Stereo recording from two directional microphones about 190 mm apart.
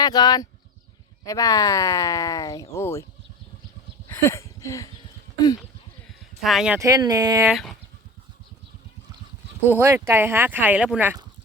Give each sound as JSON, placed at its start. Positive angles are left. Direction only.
{"t": 0.0, "sound": "speech", "side_deg": 20}
{"t": 4.1, "sound": "a sound", "side_deg": 15}
{"t": 6.4, "sound": "speech", "side_deg": 0}
{"t": 6.7, "sound": "speech", "side_deg": -20}
{"t": 7.4, "sound": "speech", "side_deg": 0}
{"t": 9.6, "sound": "speech", "side_deg": -10}